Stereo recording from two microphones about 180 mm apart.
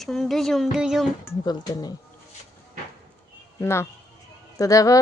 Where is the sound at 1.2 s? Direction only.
20° left (ahead or behind).